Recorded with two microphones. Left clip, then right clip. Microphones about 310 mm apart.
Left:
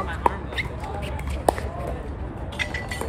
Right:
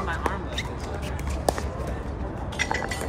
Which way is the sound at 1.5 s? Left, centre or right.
Left.